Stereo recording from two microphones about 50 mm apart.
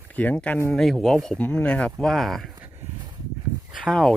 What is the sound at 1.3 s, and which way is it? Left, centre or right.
Speech, left.